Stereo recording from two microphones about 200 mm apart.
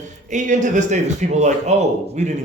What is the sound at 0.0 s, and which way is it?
Speech, 35° right (ahead or behind).